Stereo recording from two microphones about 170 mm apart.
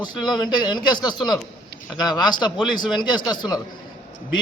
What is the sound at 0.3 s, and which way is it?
A man's voice, 25° left (ahead or behind).